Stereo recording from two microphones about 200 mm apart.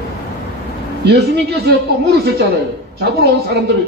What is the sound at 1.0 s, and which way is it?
A man's voice, 55° right (ahead or behind).